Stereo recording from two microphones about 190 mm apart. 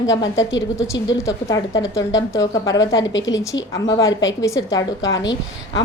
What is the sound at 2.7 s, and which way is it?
Speech, 80° left.